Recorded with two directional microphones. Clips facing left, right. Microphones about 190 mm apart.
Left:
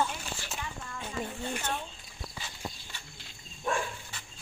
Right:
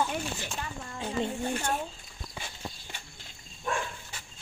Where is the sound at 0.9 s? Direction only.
30° right (ahead or behind).